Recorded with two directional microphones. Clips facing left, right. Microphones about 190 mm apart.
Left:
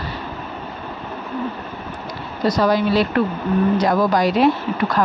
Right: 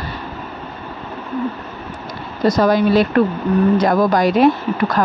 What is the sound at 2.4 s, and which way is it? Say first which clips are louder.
A woman's voice: right 3 dB; 50° right (ahead or behind).